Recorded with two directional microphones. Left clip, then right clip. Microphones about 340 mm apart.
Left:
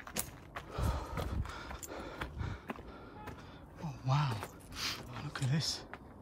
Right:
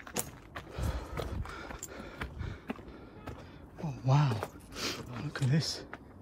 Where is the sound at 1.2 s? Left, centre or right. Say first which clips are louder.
Right 2 dB; centre.